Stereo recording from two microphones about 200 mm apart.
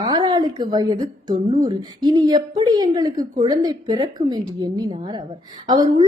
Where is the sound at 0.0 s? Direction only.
20° right (ahead or behind).